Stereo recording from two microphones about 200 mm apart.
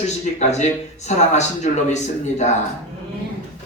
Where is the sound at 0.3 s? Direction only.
35° left (ahead or behind).